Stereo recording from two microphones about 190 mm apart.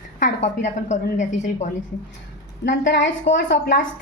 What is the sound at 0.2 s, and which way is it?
A woman's voice, 40° left (ahead or behind).